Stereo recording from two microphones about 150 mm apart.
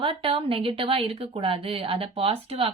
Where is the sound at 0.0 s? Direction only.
35° right (ahead or behind).